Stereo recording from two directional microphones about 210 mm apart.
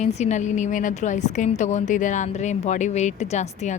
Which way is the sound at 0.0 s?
30° left (ahead or behind).